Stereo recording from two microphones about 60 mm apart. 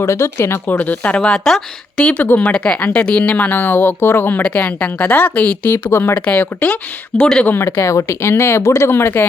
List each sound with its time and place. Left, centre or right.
0.0 s speech: left
0.7 s a woman's voice: left
4.4 s a woman's voice: left
5.7 s speech: left
6.1 s a woman's voice: left
7.1 s speech: centre
7.6 s speech: left